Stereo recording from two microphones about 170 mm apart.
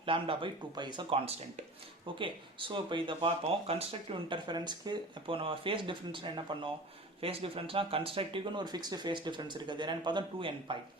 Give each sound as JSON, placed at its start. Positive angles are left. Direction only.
{"t": 0.0, "sound": "speech", "side_deg": -30}